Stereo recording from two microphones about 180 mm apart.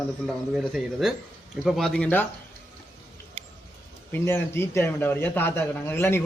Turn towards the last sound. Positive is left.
turn(degrees=15)  # may be behind; listen again after turning